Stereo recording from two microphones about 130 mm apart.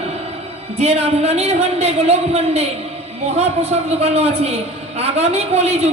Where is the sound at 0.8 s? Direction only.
55° right (ahead or behind).